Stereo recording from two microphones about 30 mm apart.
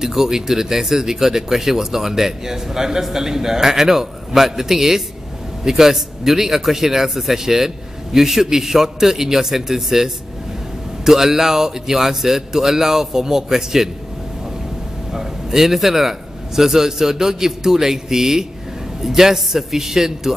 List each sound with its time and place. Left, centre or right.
0.0 s speech: centre
15.1 s a man's voice: centre